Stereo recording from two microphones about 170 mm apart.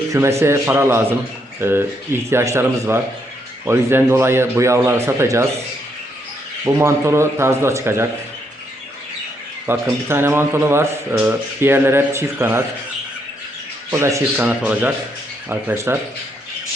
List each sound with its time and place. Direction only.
0.1 s speech: 15° right (ahead or behind)
6.7 s speech: 15° right (ahead or behind)
9.6 s speech: 15° right (ahead or behind)
13.9 s speech: 15° right (ahead or behind)